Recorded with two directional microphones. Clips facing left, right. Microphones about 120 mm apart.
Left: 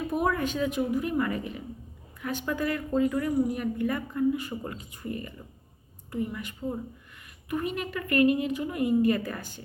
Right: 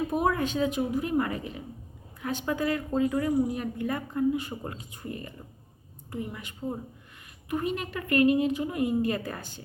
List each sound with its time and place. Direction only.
0.1 s a woman's voice: 35° right (ahead or behind)